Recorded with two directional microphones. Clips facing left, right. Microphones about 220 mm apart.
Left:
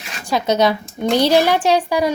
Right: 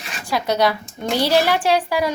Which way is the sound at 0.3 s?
20° left (ahead or behind).